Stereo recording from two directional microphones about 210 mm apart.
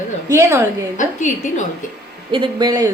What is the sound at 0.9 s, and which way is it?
Speech, 35° left (ahead or behind).